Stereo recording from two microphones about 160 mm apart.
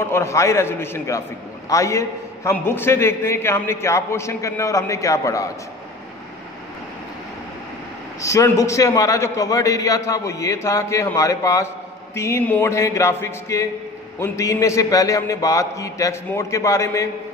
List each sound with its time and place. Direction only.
0.0 s a man's voice: 15° left (ahead or behind)
8.2 s a man's voice: 20° left (ahead or behind)